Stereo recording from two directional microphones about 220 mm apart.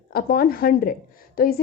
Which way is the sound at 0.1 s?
40° left (ahead or behind).